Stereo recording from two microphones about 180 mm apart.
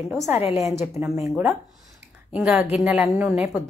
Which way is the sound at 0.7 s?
15° right (ahead or behind).